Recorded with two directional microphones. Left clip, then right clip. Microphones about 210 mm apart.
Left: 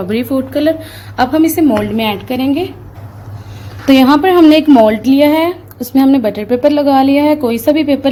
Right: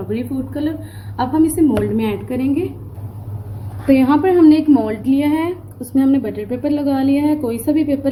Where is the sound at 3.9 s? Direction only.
50° left (ahead or behind).